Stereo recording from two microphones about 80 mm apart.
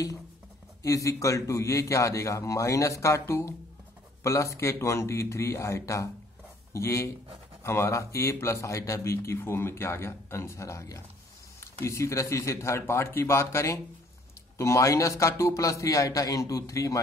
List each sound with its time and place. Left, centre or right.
0.8 s a man's voice: left